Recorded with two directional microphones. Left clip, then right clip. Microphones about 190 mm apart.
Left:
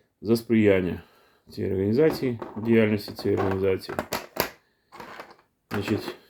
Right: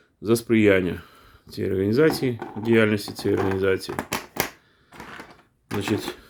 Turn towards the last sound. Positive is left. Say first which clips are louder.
# right 2 dB
turn(degrees=-25)  # may be behind; listen again after turning